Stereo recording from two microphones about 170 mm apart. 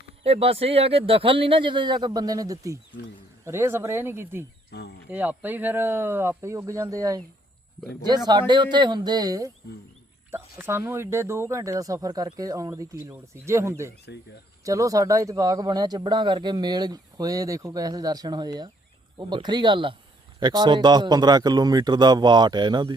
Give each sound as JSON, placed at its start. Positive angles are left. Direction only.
{"t": 0.2, "sound": "speech", "side_deg": -35}
{"t": 4.7, "sound": "speech", "side_deg": 75}
{"t": 5.0, "sound": "speech", "side_deg": -10}